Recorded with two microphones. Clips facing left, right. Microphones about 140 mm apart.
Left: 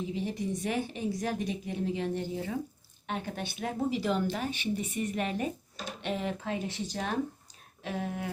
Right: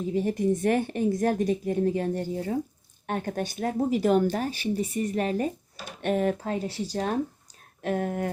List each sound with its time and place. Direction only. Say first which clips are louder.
0.1 s a woman's voice: right 8 dB; 50° right (ahead or behind)
6.0 s speech: right 9 dB; 50° right (ahead or behind); by 7.1 s 35° right (ahead or behind)
7.8 s a woman's voice: right 7 dB; 55° right (ahead or behind)